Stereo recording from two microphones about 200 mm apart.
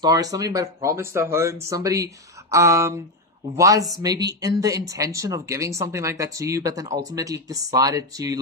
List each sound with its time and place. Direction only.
0.0 s speech: 20° right (ahead or behind)